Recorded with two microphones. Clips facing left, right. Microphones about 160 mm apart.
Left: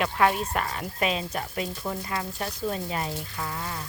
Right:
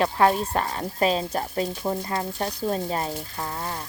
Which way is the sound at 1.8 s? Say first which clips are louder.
Right 4 dB; 25° right (ahead or behind).